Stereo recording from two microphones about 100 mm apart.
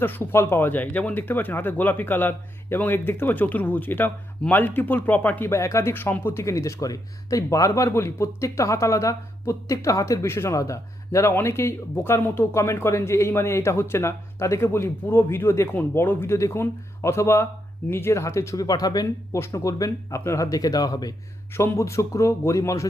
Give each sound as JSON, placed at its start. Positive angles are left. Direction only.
{"t": 0.0, "sound": "speech", "side_deg": 20}
{"t": 5.5, "sound": "speech", "side_deg": 30}
{"t": 21.6, "sound": "speech", "side_deg": 30}